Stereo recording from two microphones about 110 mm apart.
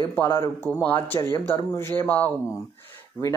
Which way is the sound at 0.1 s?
20° left (ahead or behind).